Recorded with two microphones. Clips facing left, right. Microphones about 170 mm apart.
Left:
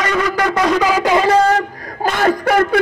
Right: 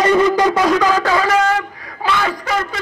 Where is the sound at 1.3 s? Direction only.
35° left (ahead or behind); by 2.7 s 55° left (ahead or behind).